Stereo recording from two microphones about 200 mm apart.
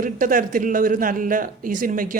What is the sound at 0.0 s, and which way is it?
Speech, 45° right (ahead or behind).